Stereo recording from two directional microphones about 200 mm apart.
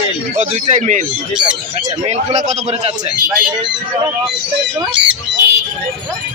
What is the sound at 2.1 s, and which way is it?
Speech, 35° right (ahead or behind).